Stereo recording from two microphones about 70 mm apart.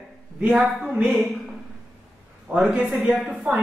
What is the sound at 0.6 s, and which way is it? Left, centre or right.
Speech, centre.